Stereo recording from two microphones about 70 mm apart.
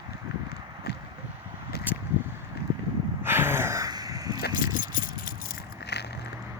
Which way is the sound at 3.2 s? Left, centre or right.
Right.